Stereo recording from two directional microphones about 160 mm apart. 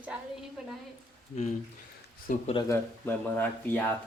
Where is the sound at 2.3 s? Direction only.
55° left (ahead or behind).